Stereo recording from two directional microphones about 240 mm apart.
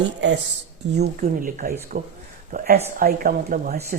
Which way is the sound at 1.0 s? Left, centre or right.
Right.